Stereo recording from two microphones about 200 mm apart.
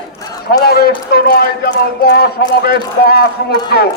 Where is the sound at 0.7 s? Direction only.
50° left (ahead or behind).